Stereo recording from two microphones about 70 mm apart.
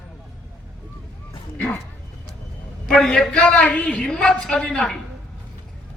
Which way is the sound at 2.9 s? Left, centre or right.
Centre.